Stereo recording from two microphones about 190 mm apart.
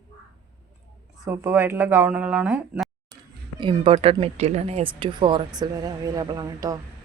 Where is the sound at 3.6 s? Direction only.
25° right (ahead or behind).